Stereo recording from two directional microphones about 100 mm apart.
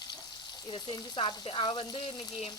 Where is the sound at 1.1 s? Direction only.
60° left (ahead or behind).